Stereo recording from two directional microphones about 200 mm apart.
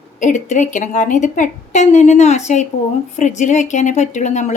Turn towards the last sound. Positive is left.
turn(degrees=35)  # may be behind; listen again after turning